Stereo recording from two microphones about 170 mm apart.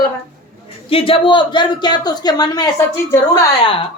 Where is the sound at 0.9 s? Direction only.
30° left (ahead or behind); by 3.2 s 15° left (ahead or behind).